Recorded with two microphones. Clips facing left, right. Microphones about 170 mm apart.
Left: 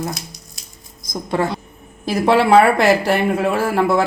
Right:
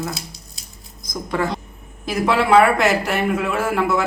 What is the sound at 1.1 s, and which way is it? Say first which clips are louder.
Speech: left 2 dB; 25° left (ahead or behind).